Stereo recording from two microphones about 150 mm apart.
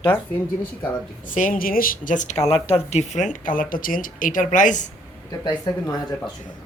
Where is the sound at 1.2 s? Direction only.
60° left (ahead or behind).